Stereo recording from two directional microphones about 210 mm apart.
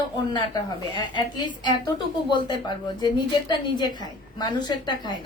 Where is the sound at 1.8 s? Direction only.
20° left (ahead or behind).